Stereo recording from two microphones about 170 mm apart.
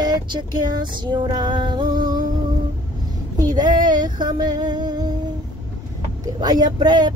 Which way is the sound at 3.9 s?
25° right (ahead or behind).